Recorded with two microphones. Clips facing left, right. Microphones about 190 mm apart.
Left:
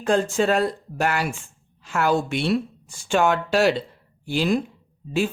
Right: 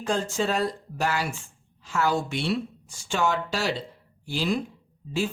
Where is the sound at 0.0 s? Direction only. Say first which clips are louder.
Left 6 dB; 55° left (ahead or behind).